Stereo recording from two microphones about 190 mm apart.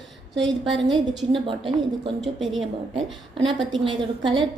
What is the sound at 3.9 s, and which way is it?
Speech, 25° right (ahead or behind).